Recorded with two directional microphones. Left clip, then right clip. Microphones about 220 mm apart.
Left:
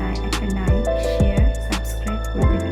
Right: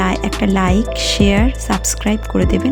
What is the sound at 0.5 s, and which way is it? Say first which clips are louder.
Speech: right 3 dB; 45° right (ahead or behind).